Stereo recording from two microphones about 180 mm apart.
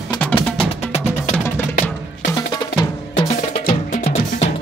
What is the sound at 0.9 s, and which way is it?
Music, 40° left (ahead or behind).